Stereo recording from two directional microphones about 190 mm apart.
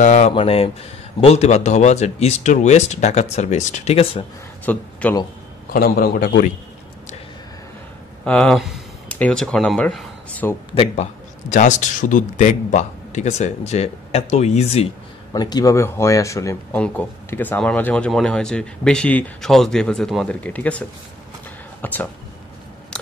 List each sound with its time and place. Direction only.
0.0 s a man's voice: 40° left (ahead or behind)
4.7 s speech: 10° left (ahead or behind)
5.7 s a man's voice: 50° left (ahead or behind)
8.3 s speech: centre (ahead or behind)
10.7 s a man's voice: 30° left (ahead or behind)
15.3 s speech: 20° left (ahead or behind)
21.8 s speech: 10° left (ahead or behind)